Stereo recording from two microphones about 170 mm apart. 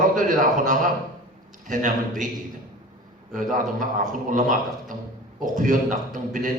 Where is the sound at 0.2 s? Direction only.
50° right (ahead or behind).